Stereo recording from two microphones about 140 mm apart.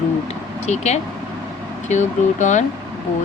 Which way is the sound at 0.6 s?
55° left (ahead or behind).